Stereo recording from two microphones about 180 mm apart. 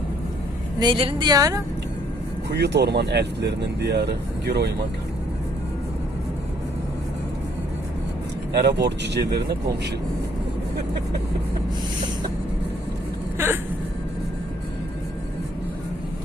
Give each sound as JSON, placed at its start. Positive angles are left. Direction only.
{"t": 0.8, "sound": "a woman's voice", "side_deg": -30}
{"t": 2.5, "sound": "speech", "side_deg": -70}
{"t": 8.5, "sound": "speech", "side_deg": -70}